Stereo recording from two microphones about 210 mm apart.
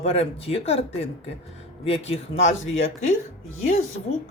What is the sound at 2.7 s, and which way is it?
Speech, 70° left (ahead or behind).